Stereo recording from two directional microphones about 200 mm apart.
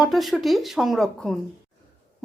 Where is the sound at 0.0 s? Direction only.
Centre (ahead or behind).